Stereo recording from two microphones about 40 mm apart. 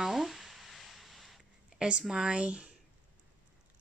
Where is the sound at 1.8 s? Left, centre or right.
Right.